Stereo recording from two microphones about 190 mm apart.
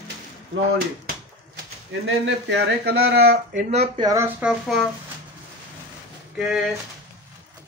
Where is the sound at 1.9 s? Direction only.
90° right.